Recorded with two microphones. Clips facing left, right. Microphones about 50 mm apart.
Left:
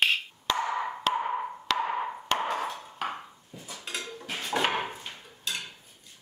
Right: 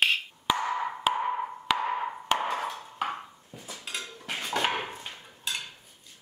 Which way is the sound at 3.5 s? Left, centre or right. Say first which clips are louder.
Even; right.